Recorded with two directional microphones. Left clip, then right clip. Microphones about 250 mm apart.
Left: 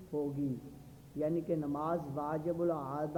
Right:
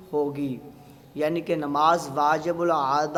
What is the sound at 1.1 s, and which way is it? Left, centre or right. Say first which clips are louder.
A man's voice: right 9 dB; centre.